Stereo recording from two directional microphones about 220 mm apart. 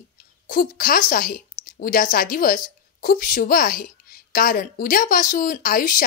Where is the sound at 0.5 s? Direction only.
40° left (ahead or behind).